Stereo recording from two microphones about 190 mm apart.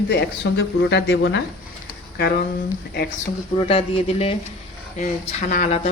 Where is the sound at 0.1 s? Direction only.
65° left (ahead or behind).